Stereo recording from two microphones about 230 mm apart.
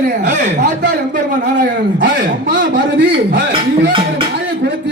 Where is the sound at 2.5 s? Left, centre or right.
Right.